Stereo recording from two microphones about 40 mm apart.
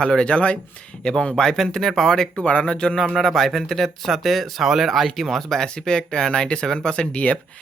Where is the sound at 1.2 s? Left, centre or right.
Centre.